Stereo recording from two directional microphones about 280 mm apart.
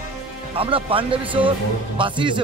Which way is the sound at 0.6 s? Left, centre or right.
Centre.